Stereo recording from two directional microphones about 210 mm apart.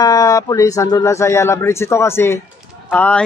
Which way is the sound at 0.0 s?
15° left (ahead or behind).